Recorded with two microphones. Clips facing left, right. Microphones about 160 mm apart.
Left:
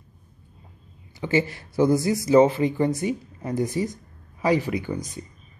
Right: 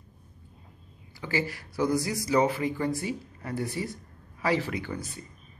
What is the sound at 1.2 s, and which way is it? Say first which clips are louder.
Speech: left 7 dB; 20° left (ahead or behind).